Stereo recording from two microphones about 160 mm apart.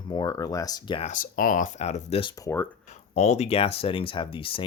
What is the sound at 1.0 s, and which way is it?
Speech, 55° left (ahead or behind).